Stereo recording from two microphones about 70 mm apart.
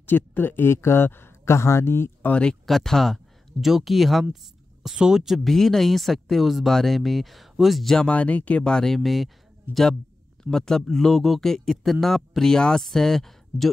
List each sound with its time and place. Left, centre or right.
0.0 s speech: left
2.2 s speech: centre
2.6 s speech: centre
8.1 s speech: left; by 9.3 s centre
10.5 s speech: centre